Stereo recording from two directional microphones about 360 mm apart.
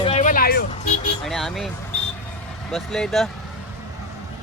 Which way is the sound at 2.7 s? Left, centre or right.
Centre.